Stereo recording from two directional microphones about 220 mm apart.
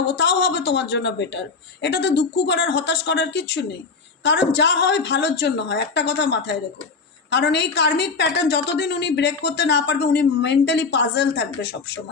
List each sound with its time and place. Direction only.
0.1 s a woman's voice: 55° left (ahead or behind)